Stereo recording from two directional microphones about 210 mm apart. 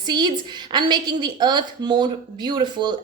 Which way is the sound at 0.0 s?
20° right (ahead or behind).